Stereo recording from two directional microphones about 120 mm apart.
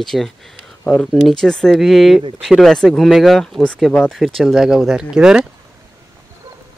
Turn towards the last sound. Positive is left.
turn(degrees=-5)  # may be behind; listen again after turning